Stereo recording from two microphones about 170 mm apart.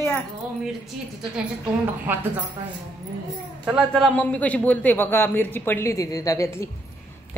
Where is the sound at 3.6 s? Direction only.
5° right (ahead or behind).